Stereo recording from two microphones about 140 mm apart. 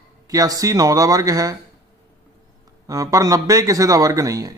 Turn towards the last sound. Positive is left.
turn(degrees=-25)  # may be behind; listen again after turning